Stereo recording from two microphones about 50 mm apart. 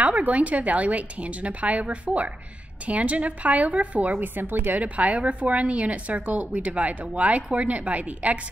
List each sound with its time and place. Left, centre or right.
0.0 s a woman's voice: right
4.7 s a woman's voice: right